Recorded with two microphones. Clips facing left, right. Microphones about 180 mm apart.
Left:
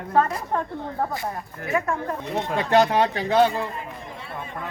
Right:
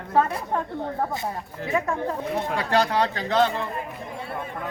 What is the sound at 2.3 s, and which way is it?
Speech, 20° left (ahead or behind).